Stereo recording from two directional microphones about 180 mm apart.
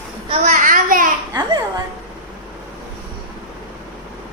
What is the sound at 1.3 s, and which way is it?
Speech, 20° right (ahead or behind).